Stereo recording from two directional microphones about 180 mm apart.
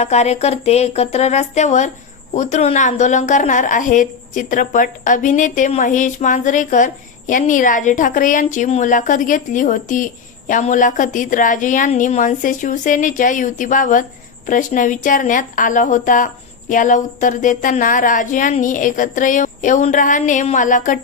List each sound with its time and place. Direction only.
0.0 s a woman's voice: 40° left (ahead or behind)